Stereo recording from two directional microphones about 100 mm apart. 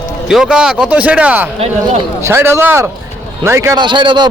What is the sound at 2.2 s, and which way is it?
Speech, 25° right (ahead or behind).